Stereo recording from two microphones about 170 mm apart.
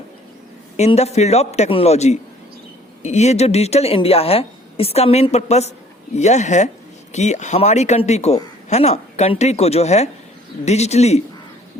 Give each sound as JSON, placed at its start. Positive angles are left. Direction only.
{"t": 0.8, "sound": "speech", "side_deg": 40}